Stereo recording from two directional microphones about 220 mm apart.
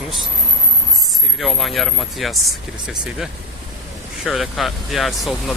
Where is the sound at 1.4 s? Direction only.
Centre (ahead or behind).